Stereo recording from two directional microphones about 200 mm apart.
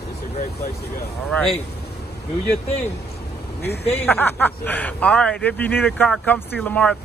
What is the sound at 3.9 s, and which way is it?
Speech, 10° left (ahead or behind).